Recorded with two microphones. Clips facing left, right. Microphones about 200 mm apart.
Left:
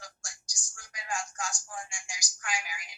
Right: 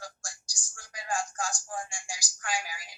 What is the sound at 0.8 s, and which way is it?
Speech, 35° right (ahead or behind).